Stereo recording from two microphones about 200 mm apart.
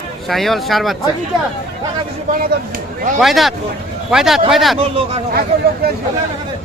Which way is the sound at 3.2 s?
Centre (ahead or behind).